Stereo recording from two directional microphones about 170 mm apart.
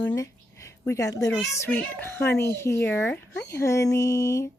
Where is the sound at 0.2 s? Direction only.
20° left (ahead or behind).